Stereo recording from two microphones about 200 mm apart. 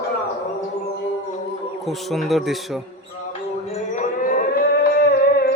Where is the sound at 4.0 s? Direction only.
45° left (ahead or behind).